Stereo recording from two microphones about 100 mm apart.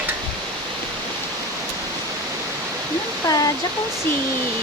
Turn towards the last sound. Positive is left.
turn(degrees=40)  # may be behind; listen again after turning